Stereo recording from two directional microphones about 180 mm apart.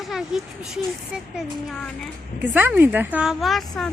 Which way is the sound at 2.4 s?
10° right (ahead or behind).